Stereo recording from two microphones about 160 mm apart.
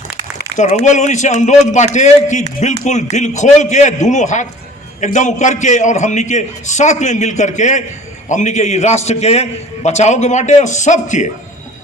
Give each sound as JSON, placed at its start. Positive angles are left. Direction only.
{"t": 0.5, "sound": "a man's voice", "side_deg": 45}